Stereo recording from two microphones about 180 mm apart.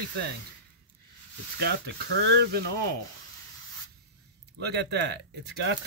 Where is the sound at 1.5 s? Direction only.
70° right (ahead or behind).